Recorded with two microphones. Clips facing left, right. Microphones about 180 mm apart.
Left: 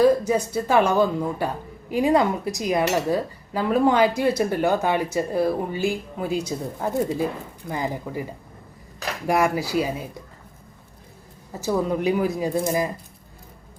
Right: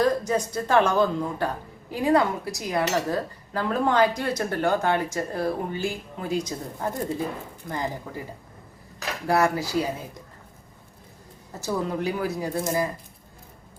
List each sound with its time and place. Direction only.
0.0 s speech: 10° left (ahead or behind)
9.2 s speech: 15° left (ahead or behind)
11.6 s speech: 15° left (ahead or behind)